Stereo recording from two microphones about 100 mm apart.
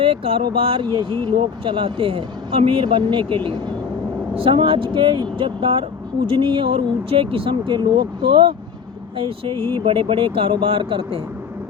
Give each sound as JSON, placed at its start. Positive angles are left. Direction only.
{"t": 0.0, "sound": "speech", "side_deg": -65}
{"t": 4.4, "sound": "speech", "side_deg": -60}